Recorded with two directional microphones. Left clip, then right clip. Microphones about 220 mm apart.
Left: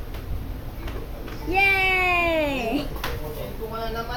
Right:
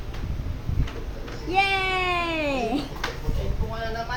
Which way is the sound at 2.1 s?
20° right (ahead or behind).